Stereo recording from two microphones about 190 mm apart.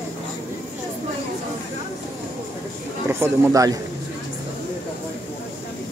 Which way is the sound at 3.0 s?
15° right (ahead or behind).